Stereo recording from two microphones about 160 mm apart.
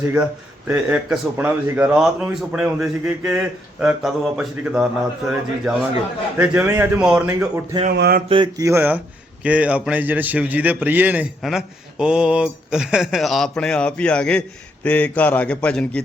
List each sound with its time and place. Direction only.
0.7 s a man's voice: 10° right (ahead or behind)
7.9 s a sound: 80° right
8.3 s mantra: 25° right (ahead or behind)
9.4 s a man's voice: 10° right (ahead or behind)